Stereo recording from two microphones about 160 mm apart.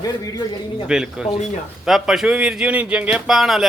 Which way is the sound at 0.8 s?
5° right (ahead or behind).